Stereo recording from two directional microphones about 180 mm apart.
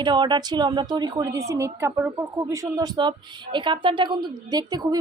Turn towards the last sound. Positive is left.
turn(degrees=-20)  # may be behind; listen again after turning